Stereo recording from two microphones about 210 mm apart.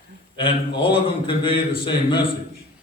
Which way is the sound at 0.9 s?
25° left (ahead or behind).